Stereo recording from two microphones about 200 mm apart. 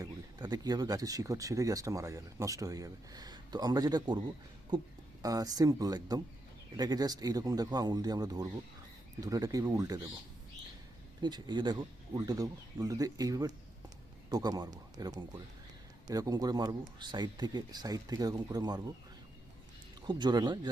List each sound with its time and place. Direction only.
0.0 s speech: 20° right (ahead or behind)
5.2 s speech: 15° right (ahead or behind)
11.2 s speech: 20° right (ahead or behind)
20.1 s speech: 20° right (ahead or behind)